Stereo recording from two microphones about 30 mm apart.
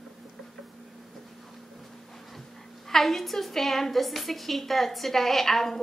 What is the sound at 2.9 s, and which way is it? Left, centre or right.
A woman's voice, centre.